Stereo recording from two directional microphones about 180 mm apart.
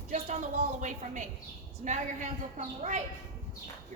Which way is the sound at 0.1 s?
40° right (ahead or behind).